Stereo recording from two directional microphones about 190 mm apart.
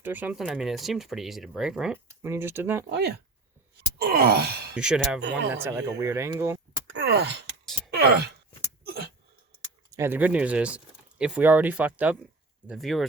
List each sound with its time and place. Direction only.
0.0 s speech: 10° right (ahead or behind)
2.2 s speech: 15° right (ahead or behind)
2.9 s speech: 60° right (ahead or behind)
3.9 s wail: 55° right (ahead or behind)
4.7 s speech: 5° right (ahead or behind)
6.9 s wail: 65° right (ahead or behind)
7.9 s speech: 60° right (ahead or behind)
8.8 s a sound: 55° right (ahead or behind)
9.9 s speech: 10° right (ahead or behind)